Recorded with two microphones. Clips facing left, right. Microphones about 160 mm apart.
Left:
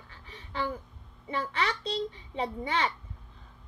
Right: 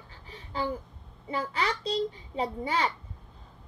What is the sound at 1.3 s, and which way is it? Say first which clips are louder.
A child's voice: right 1 dB; 35° right (ahead or behind).